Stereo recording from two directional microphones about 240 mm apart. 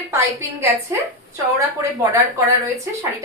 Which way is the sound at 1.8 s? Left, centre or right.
Centre.